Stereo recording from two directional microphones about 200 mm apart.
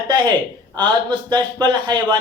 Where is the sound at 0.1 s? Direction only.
20° right (ahead or behind).